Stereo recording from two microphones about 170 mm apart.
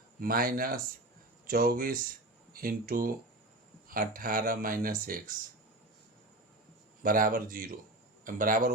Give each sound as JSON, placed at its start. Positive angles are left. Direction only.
{"t": 0.2, "sound": "speech", "side_deg": -55}
{"t": 7.0, "sound": "a man's voice", "side_deg": -55}